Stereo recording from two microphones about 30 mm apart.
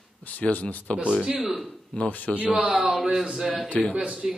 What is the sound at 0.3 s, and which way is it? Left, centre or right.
Speech, left.